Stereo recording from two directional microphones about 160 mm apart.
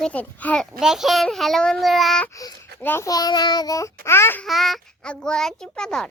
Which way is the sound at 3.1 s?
25° left (ahead or behind).